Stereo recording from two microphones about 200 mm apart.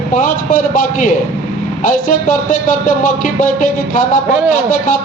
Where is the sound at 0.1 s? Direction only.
40° left (ahead or behind).